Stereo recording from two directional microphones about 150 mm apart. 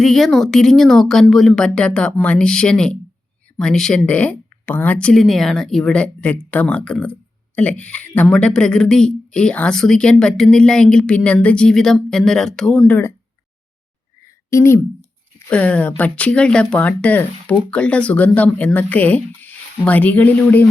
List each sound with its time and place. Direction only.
0.0 s speech: centre (ahead or behind)
14.5 s speech: 15° left (ahead or behind)